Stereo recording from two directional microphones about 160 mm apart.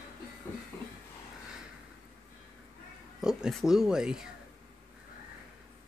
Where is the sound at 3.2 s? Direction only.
5° right (ahead or behind).